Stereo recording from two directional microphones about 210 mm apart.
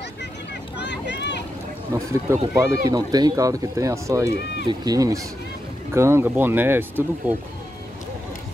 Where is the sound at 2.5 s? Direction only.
15° right (ahead or behind).